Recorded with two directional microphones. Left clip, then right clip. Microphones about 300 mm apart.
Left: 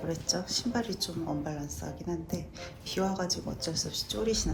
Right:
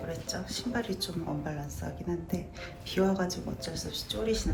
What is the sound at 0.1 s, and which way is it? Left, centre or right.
A man's voice, centre.